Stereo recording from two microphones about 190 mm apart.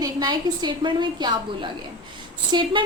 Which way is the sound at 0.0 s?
20° right (ahead or behind).